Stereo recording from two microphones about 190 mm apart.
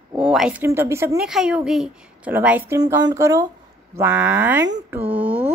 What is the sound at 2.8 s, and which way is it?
Speech, 20° right (ahead or behind).